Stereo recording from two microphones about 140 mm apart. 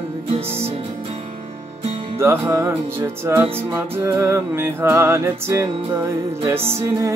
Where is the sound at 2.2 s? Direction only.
15° right (ahead or behind).